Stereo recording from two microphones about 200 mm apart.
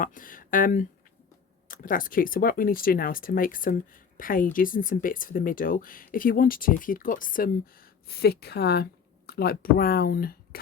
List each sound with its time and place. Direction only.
0.0 s speech: 45° left (ahead or behind)